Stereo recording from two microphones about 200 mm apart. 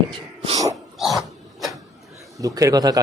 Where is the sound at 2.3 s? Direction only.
15° right (ahead or behind).